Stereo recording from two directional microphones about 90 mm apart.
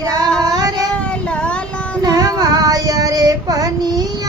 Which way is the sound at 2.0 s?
45° right (ahead or behind).